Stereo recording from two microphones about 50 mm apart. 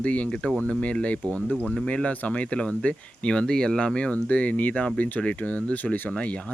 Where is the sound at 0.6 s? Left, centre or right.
Left.